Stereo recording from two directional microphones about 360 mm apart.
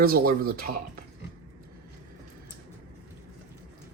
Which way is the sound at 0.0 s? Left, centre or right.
Right.